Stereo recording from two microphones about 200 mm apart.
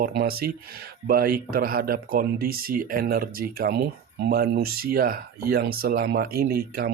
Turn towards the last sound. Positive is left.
turn(degrees=-50)  # may be behind; listen again after turning